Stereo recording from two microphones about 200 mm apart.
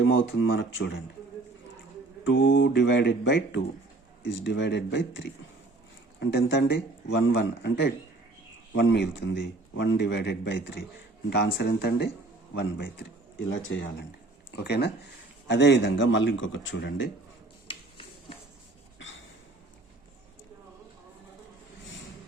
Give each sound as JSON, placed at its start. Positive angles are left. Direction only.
{"t": 0.0, "sound": "speech", "side_deg": 75}
{"t": 2.2, "sound": "speech", "side_deg": 70}
{"t": 13.7, "sound": "speech", "side_deg": 65}
{"t": 17.7, "sound": "a sound", "side_deg": 25}